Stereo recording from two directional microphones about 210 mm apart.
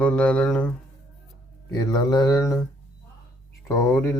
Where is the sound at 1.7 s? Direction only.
20° left (ahead or behind).